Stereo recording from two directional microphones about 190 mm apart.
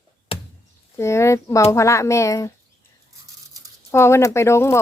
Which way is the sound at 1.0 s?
15° left (ahead or behind).